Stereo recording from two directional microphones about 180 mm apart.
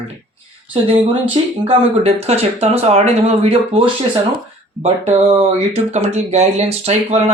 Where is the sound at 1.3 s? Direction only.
30° right (ahead or behind).